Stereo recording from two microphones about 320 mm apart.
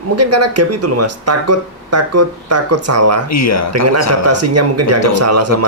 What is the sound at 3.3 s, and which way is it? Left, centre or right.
Speech, left.